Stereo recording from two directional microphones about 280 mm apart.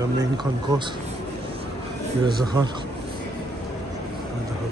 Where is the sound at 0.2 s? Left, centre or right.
Centre.